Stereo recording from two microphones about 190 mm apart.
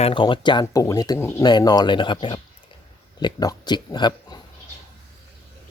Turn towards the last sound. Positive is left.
turn(degrees=25)  # may be behind; listen again after turning